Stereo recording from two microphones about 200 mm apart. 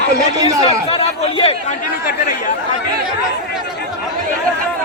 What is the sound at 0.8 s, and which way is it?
Chatter, 30° left (ahead or behind).